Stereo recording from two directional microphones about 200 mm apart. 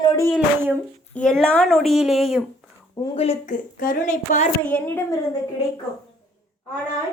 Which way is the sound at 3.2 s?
35° left (ahead or behind).